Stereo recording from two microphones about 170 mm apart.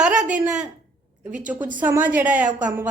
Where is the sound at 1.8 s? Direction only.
10° right (ahead or behind).